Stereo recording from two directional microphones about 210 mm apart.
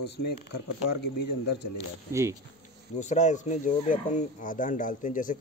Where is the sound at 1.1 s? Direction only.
50° left (ahead or behind).